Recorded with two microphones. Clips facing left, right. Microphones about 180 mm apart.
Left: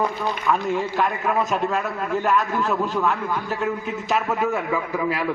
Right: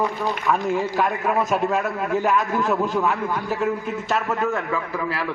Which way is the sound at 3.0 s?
5° right (ahead or behind).